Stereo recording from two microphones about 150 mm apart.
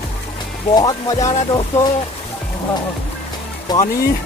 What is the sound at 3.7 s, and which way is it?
Speech, 25° left (ahead or behind).